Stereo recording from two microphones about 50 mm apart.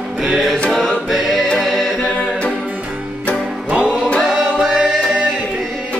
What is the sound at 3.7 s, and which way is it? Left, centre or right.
Music, right.